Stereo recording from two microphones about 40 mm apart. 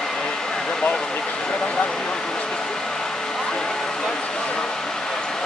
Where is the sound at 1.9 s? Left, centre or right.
Centre.